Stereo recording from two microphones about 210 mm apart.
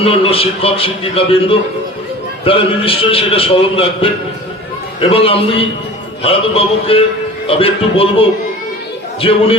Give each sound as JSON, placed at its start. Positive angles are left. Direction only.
{"t": 0.0, "sound": "a man's voice", "side_deg": 25}